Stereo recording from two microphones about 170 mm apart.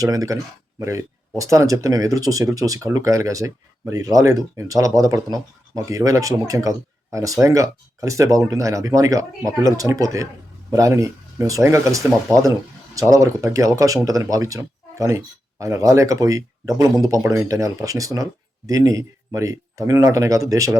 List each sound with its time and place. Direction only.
0.0 s speech: 20° right (ahead or behind)